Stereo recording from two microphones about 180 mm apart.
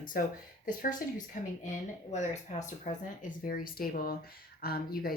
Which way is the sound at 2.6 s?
45° left (ahead or behind).